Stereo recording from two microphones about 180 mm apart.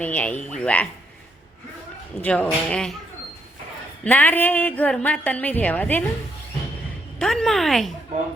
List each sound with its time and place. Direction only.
0.0 s a woman's voice: 10° left (ahead or behind)
2.2 s speech: 5° left (ahead or behind)
4.0 s a woman's voice: 10° left (ahead or behind)
7.2 s speech: 5° left (ahead or behind)